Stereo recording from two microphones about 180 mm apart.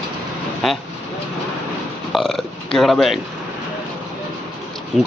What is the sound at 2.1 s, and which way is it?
A man's voice, 5° left (ahead or behind).